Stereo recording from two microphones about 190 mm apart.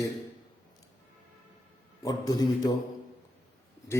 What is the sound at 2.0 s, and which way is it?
Speech, 20° left (ahead or behind).